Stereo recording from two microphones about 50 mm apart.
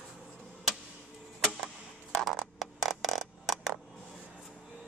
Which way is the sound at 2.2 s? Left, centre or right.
Centre.